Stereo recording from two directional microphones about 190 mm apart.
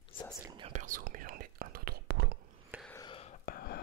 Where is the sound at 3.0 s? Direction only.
30° left (ahead or behind).